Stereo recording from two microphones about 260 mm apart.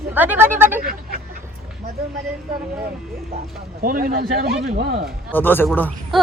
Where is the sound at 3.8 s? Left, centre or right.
Right.